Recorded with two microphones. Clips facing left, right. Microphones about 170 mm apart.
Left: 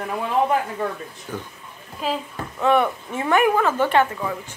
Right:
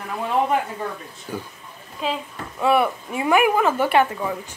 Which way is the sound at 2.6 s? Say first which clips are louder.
Even; 5° right (ahead or behind).